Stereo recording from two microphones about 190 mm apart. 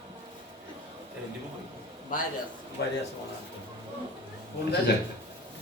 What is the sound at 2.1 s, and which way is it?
Speech, 45° left (ahead or behind).